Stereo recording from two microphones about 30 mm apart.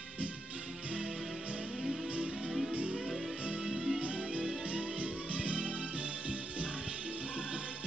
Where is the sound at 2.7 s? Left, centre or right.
Right.